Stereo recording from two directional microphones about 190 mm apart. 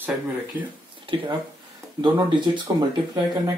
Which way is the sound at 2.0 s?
25° right (ahead or behind).